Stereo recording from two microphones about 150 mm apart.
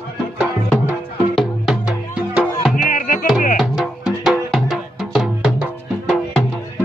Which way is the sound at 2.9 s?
65° left (ahead or behind).